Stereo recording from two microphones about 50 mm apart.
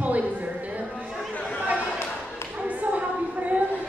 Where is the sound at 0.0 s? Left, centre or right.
Right.